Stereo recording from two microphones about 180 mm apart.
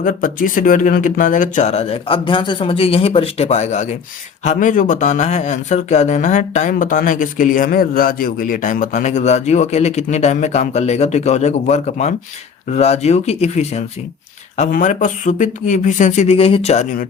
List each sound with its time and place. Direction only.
0.0 s speech: 50° left (ahead or behind)